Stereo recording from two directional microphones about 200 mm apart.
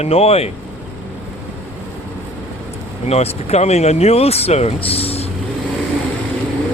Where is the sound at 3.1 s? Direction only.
30° left (ahead or behind).